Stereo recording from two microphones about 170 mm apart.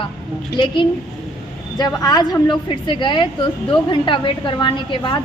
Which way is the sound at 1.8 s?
25° left (ahead or behind).